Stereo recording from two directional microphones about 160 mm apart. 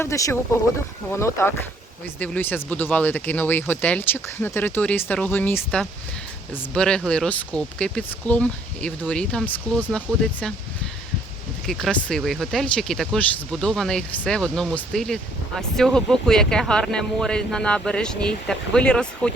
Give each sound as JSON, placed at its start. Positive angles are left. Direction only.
{"t": 0.0, "sound": "speech", "side_deg": 20}
{"t": 11.6, "sound": "speech", "side_deg": 0}